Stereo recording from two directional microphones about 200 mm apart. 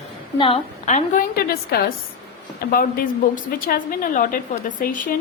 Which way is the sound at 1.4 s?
50° left (ahead or behind).